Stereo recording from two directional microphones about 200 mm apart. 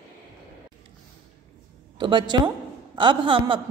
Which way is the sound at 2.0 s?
25° right (ahead or behind).